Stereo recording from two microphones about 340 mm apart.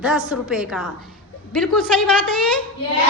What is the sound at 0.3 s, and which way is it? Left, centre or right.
Speech, centre.